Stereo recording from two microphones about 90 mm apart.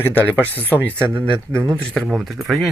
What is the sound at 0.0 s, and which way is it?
Speech, 20° left (ahead or behind).